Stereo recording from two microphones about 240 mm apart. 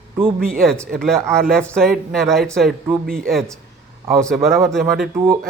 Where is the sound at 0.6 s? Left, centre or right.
Centre.